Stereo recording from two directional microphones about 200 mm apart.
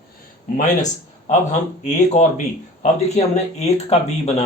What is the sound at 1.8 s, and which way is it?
Speech, 35° left (ahead or behind).